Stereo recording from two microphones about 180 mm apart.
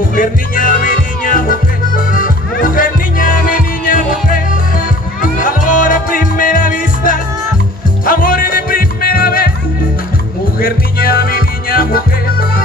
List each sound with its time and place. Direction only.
0.1 s music: 50° left (ahead or behind)
10.6 s music: 55° left (ahead or behind)